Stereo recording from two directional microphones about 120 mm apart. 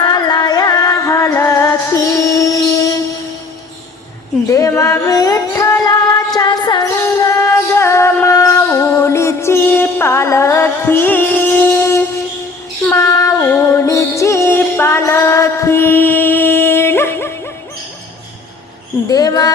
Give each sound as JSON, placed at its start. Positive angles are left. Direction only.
{"t": 0.0, "sound": "music", "side_deg": 35}
{"t": 4.4, "sound": "speech", "side_deg": 25}
{"t": 4.8, "sound": "music", "side_deg": 25}
{"t": 19.0, "sound": "a sound", "side_deg": 30}